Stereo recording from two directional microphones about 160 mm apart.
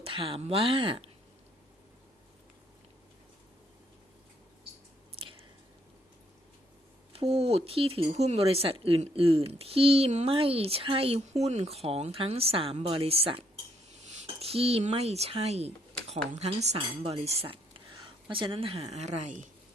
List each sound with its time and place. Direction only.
0.0 s speech: 35° right (ahead or behind)
5.2 s a sound: 35° right (ahead or behind)
7.1 s speech: 35° right (ahead or behind)